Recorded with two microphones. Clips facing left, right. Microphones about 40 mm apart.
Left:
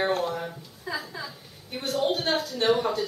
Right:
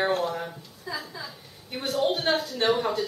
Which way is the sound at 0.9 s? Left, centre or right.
Left.